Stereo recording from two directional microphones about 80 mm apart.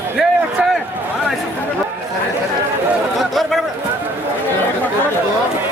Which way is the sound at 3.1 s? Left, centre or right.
Centre.